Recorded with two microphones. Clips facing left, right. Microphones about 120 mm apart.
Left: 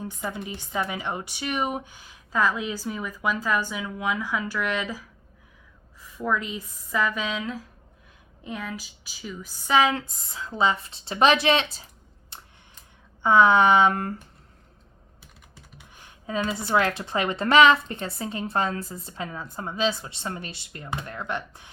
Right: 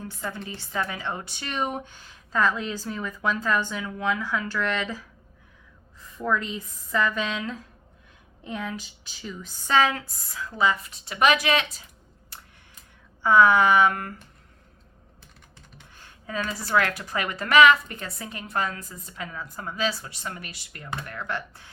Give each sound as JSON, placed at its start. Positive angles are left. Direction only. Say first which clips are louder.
{"t": 0.0, "sound": "a woman's voice", "louder": "left 2 dB", "side_deg": 15}
{"t": 9.9, "sound": "a woman's voice", "louder": "left 3 dB", "side_deg": 25}
{"t": 12.3, "sound": "a sound", "louder": "left 1 dB", "side_deg": 25}
{"t": 13.2, "sound": "a woman's voice", "louder": "left 1 dB", "side_deg": 20}
{"t": 15.8, "sound": "a woman's voice", "louder": "even", "side_deg": 15}